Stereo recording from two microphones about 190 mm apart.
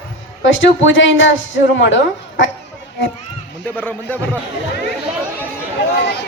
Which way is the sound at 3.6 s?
10° left (ahead or behind).